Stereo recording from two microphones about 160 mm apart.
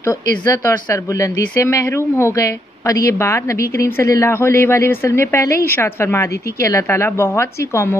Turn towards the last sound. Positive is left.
turn(degrees=15)  # may be behind; listen again after turning